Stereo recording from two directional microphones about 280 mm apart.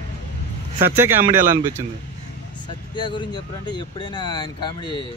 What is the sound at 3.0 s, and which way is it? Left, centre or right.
Speech, centre.